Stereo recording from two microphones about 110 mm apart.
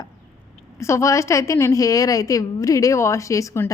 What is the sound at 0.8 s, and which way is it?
A woman's voice, 25° left (ahead or behind).